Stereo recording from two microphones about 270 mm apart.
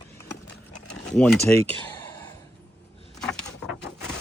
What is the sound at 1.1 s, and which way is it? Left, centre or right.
Speech, centre.